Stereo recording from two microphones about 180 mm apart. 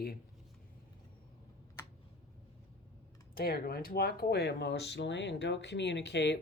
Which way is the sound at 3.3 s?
60° left (ahead or behind).